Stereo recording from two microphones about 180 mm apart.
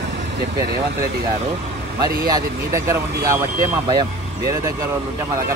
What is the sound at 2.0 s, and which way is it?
Speech, 20° right (ahead or behind).